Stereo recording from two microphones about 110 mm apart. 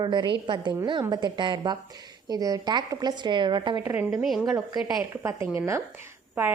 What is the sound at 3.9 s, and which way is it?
Speech, 25° right (ahead or behind).